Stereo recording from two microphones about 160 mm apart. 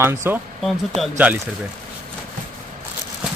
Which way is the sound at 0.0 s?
15° right (ahead or behind).